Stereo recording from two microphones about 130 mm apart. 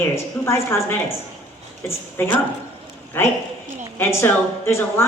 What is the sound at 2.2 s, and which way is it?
A woman's voice, 20° left (ahead or behind).